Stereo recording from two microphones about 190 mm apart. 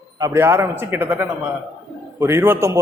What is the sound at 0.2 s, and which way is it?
A man's voice, 15° right (ahead or behind).